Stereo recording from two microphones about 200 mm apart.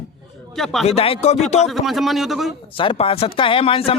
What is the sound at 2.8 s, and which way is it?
Speech, 25° left (ahead or behind).